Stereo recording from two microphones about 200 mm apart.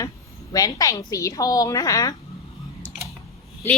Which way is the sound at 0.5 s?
15° left (ahead or behind).